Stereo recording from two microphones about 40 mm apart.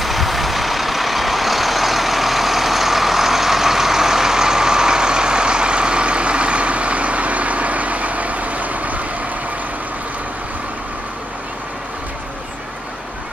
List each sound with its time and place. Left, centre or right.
0.0 s vehicle: centre; by 9.0 s right